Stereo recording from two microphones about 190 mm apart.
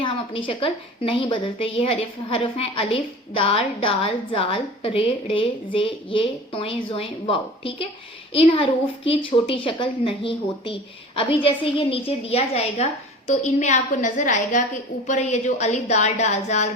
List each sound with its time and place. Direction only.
0.0 s a woman's voice: 25° left (ahead or behind)